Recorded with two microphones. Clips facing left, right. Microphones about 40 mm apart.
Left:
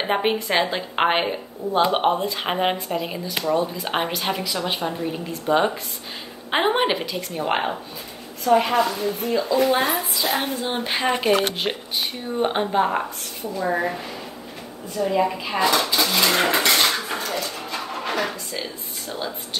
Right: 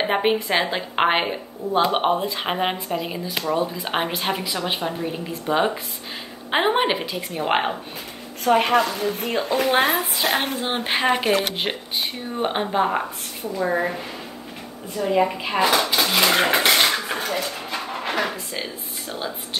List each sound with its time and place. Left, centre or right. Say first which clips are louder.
0.0 s a woman's voice: right 1 dB; centre
3.4 s a woman's voice: left 2 dB; centre
7.3 s speech: right 2 dB; centre
8.5 s a woman's voice: even; right
10.6 s a woman's voice: even; right
10.9 s a woman's voice: right 1 dB; centre
15.0 s a woman's voice: right 1 dB; centre
16.4 s dishes: right 1 dB; right